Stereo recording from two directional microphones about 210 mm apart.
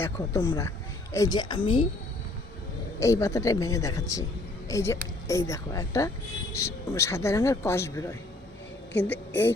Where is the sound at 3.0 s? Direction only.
15° left (ahead or behind).